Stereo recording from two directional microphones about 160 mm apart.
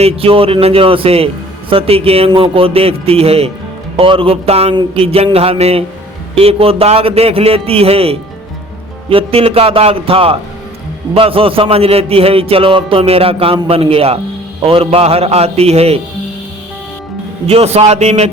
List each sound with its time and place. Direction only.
0.0 s a man's voice: 35° right (ahead or behind)
17.4 s a man's voice: 40° right (ahead or behind)